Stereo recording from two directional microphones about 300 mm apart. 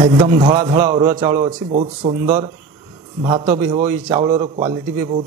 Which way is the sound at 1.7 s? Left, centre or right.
Right.